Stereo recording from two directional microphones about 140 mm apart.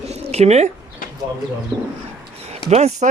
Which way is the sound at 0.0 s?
50° right (ahead or behind).